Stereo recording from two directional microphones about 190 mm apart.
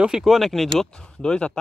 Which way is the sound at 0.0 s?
5° right (ahead or behind).